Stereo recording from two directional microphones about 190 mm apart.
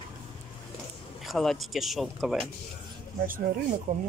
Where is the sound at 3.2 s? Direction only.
45° right (ahead or behind).